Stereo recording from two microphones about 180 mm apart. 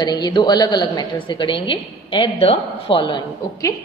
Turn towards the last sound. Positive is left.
turn(degrees=20)  # may be behind; listen again after turning